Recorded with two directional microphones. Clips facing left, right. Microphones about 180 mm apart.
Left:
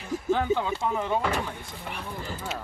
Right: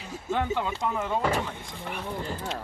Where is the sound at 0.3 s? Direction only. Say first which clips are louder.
Left 2 dB; centre (ahead or behind).